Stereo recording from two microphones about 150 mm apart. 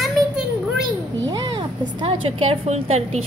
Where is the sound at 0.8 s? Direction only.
30° right (ahead or behind).